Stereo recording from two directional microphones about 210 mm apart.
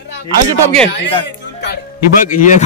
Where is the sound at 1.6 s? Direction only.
45° left (ahead or behind).